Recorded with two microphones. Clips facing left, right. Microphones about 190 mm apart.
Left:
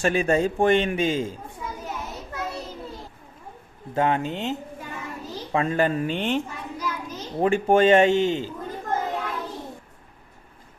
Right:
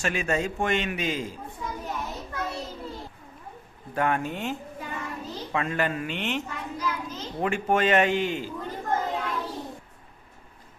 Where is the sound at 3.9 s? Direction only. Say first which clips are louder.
Left 3 dB; 25° left (ahead or behind).